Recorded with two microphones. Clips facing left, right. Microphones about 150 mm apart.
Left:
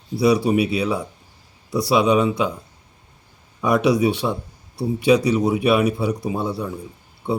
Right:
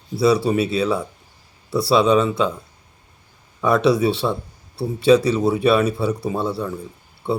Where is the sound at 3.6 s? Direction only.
15° left (ahead or behind).